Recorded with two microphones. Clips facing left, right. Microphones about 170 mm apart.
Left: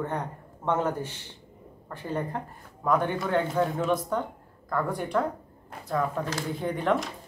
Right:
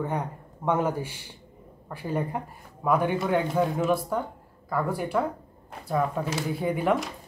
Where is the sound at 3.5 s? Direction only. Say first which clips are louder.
Right 1 dB; 10° right (ahead or behind).